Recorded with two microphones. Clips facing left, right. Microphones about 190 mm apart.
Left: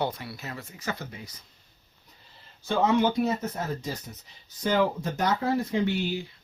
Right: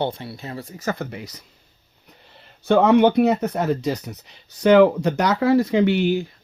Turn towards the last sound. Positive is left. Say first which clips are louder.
# right 9 dB
turn(degrees=-55)  # may be behind; listen again after turning